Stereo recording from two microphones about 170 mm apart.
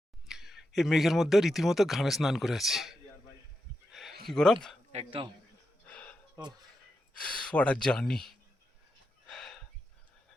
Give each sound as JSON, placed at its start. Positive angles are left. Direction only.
{"t": 0.3, "sound": "speech", "side_deg": 0}
{"t": 4.3, "sound": "speech", "side_deg": 5}
{"t": 4.9, "sound": "speech", "side_deg": -35}
{"t": 5.8, "sound": "a sound", "side_deg": 10}
{"t": 7.1, "sound": "speech", "side_deg": 5}
{"t": 9.2, "sound": "a sound", "side_deg": 0}